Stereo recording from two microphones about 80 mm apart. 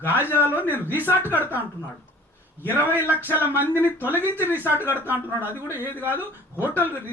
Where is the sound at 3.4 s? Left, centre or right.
Right.